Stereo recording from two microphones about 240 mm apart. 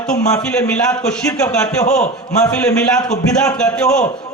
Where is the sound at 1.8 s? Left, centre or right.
Left.